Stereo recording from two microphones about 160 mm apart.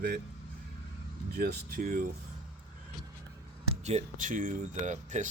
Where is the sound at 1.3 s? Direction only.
70° right (ahead or behind).